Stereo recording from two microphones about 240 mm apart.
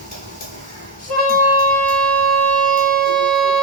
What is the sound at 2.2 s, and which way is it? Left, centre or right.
Siren, right.